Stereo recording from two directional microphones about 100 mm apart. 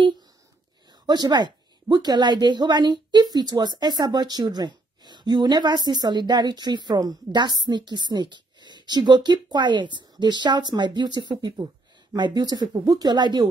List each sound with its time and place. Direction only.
1.0 s a woman's voice: 45° right (ahead or behind)